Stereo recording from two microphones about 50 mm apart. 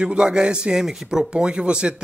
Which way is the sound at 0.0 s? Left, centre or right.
Centre.